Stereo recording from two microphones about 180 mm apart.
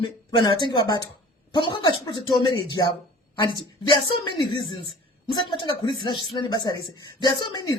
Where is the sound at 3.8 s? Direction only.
25° left (ahead or behind).